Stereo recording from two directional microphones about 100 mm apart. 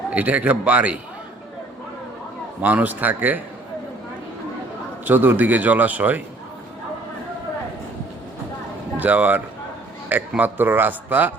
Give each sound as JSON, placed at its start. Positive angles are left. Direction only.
{"t": 0.1, "sound": "a man's voice", "side_deg": -15}
{"t": 2.6, "sound": "a man's voice", "side_deg": -15}
{"t": 5.0, "sound": "a man's voice", "side_deg": -20}
{"t": 9.0, "sound": "a man's voice", "side_deg": -15}